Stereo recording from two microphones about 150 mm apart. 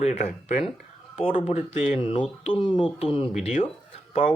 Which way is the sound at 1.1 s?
40° left (ahead or behind).